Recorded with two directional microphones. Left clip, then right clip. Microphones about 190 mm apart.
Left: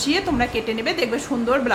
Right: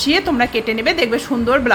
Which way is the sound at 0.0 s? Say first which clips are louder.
Right 5 dB; 25° right (ahead or behind).